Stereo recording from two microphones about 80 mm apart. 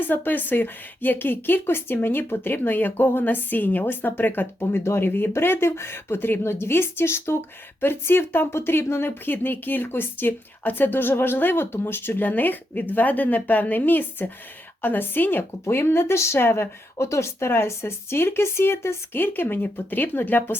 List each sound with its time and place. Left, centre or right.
0.0 s speech: left